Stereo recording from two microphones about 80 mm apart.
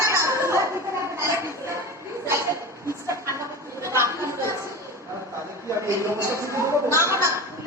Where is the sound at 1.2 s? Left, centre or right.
Right.